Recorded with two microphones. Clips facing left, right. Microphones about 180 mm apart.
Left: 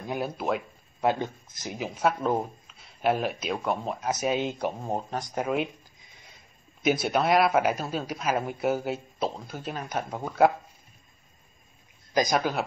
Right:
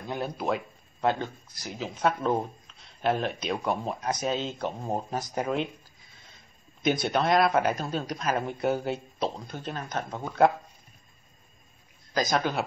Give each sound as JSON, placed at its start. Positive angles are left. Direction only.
{"t": 0.0, "sound": "speech", "side_deg": 10}
{"t": 1.0, "sound": "speech", "side_deg": 20}
{"t": 2.0, "sound": "speech", "side_deg": 5}
{"t": 4.8, "sound": "speech", "side_deg": 0}
{"t": 6.8, "sound": "speech", "side_deg": 5}
{"t": 12.1, "sound": "speech", "side_deg": 15}